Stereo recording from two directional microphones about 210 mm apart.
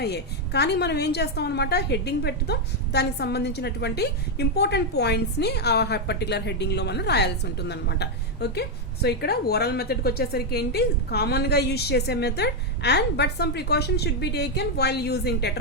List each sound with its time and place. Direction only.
0.0 s a woman's voice: 50° left (ahead or behind)